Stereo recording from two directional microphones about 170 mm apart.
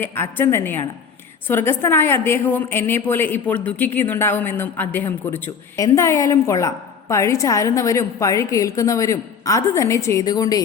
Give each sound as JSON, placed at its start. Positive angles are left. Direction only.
{"t": 0.0, "sound": "a woman's voice", "side_deg": 10}